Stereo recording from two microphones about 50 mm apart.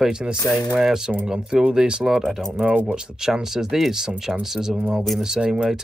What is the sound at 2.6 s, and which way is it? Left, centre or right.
Speech, centre.